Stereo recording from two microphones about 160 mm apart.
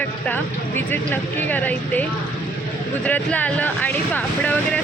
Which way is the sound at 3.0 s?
10° left (ahead or behind).